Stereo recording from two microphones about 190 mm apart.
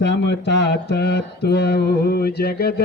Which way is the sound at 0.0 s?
65° left (ahead or behind).